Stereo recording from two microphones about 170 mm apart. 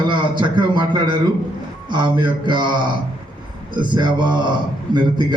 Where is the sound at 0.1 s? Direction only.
25° right (ahead or behind).